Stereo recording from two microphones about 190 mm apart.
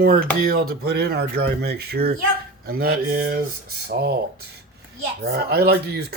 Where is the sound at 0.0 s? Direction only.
50° right (ahead or behind).